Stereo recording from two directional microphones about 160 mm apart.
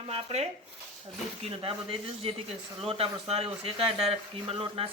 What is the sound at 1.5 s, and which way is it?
Speech, 35° right (ahead or behind).